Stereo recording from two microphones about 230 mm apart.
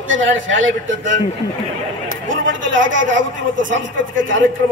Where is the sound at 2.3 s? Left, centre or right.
Right.